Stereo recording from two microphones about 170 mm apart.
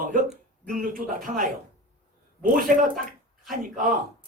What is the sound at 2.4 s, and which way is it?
Speech, 55° right (ahead or behind).